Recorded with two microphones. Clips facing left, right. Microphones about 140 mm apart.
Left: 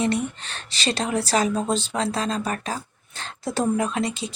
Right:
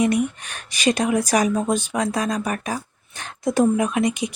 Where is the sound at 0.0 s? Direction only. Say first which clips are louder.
Right 4 dB; 15° right (ahead or behind).